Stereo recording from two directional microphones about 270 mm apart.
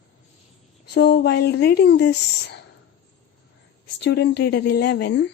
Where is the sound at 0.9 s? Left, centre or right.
Left.